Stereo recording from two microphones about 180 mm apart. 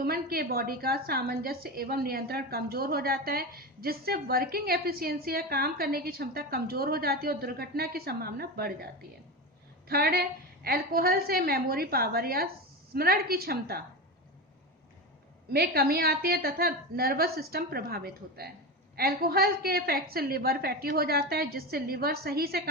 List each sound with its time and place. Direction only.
0.0 s a woman's voice: 60° right (ahead or behind)
15.5 s a woman's voice: 60° right (ahead or behind)